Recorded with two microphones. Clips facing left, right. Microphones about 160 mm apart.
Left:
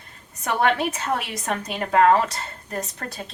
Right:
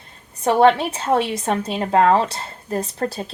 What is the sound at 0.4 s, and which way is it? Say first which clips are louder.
A woman's voice: right 7 dB; 30° right (ahead or behind).